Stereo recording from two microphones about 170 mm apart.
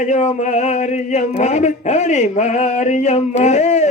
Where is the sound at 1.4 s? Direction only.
45° left (ahead or behind).